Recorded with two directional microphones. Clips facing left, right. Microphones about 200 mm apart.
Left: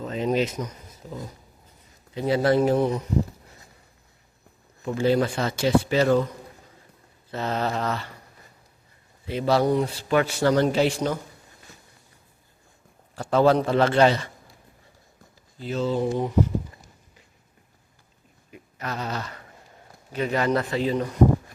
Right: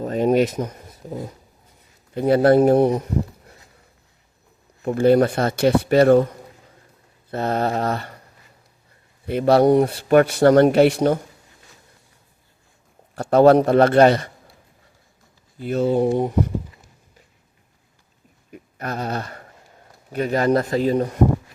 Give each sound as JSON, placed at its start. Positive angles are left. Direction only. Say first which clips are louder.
{"t": 0.0, "sound": "speech", "louder": "right 6 dB", "side_deg": -50}
{"t": 4.8, "sound": "speech", "louder": "right 6 dB", "side_deg": -55}
{"t": 9.2, "sound": "speech", "louder": "right 7 dB", "side_deg": -55}
{"t": 13.1, "sound": "speech", "louder": "right 6 dB", "side_deg": -55}
{"t": 15.5, "sound": "speech", "louder": "right 6 dB", "side_deg": -55}
{"t": 18.5, "sound": "a sound", "louder": "right 4 dB", "side_deg": -50}
{"t": 20.1, "sound": "speech", "louder": "right 5 dB", "side_deg": -40}